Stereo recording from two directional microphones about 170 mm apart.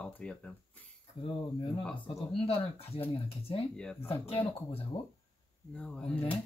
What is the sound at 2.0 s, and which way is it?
Speech, 35° left (ahead or behind).